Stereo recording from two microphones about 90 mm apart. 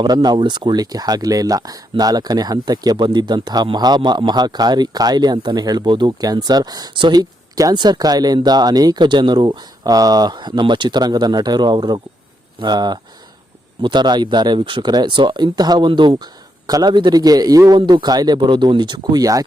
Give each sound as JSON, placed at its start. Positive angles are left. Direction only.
{"t": 0.0, "sound": "speech", "side_deg": -50}
{"t": 15.9, "sound": "speech", "side_deg": -60}
{"t": 17.7, "sound": "speech", "side_deg": -55}
{"t": 18.3, "sound": "speech", "side_deg": -60}